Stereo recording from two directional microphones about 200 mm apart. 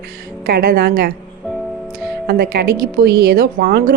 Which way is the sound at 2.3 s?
50° right (ahead or behind).